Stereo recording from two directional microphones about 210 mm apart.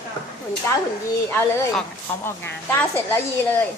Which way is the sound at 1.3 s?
10° left (ahead or behind).